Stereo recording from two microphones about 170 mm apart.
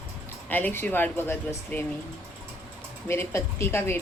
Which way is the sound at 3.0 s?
15° left (ahead or behind).